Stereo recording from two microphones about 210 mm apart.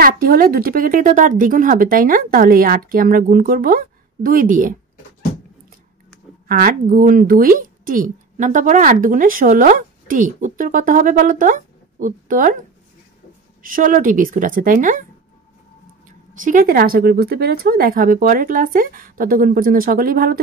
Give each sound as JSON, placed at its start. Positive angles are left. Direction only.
{"t": 0.0, "sound": "a woman's voice", "side_deg": -45}
{"t": 6.4, "sound": "a woman's voice", "side_deg": -45}
{"t": 13.6, "sound": "a woman's voice", "side_deg": -40}
{"t": 16.3, "sound": "speech", "side_deg": -40}